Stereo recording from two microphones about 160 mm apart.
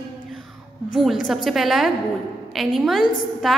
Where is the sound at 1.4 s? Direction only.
Centre (ahead or behind).